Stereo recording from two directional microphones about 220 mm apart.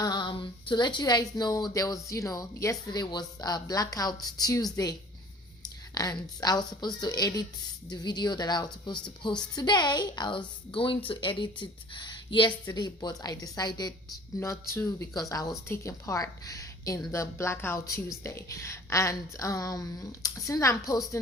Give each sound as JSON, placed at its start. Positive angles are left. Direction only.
{"t": 0.0, "sound": "a woman's voice", "side_deg": 20}
{"t": 5.6, "sound": "a woman's voice", "side_deg": 15}